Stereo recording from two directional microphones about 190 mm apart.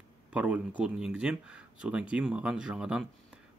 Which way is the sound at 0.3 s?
5° right (ahead or behind).